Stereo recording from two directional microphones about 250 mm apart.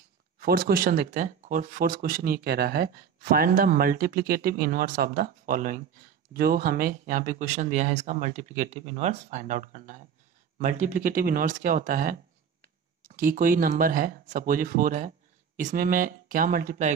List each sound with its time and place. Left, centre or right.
0.4 s speech: right